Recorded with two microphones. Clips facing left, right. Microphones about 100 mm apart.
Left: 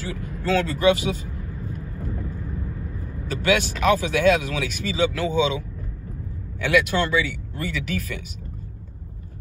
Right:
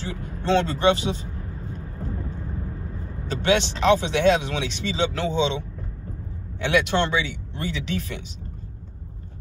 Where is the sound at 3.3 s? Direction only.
30° right (ahead or behind).